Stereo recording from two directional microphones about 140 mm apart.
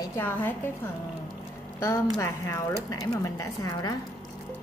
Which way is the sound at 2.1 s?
20° left (ahead or behind).